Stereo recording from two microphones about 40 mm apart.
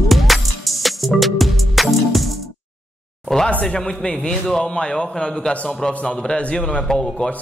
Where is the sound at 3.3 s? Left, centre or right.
Centre.